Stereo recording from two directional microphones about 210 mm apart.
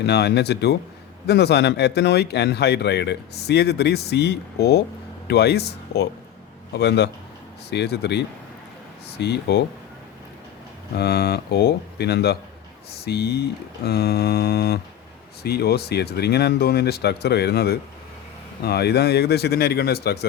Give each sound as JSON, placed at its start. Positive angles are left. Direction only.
{"t": 0.0, "sound": "speech", "side_deg": 50}
{"t": 10.9, "sound": "speech", "side_deg": 50}